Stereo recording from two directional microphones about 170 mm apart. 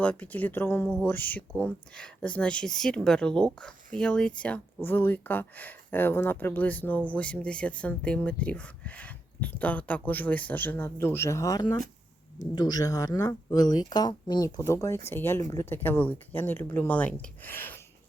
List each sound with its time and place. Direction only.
0.0 s speech: 10° left (ahead or behind)